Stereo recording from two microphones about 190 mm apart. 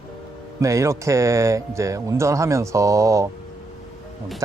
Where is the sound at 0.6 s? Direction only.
15° right (ahead or behind).